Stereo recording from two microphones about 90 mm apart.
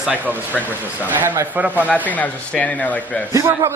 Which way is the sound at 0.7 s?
20° right (ahead or behind).